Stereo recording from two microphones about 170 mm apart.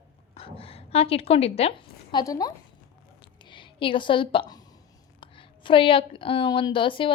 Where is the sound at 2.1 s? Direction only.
20° left (ahead or behind).